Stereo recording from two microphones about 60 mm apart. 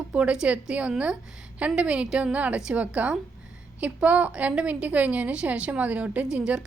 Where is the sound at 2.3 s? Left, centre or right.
Right.